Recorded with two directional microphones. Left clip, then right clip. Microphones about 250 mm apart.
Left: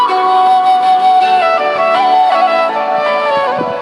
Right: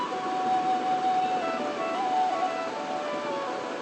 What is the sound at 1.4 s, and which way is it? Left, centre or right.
Music, left.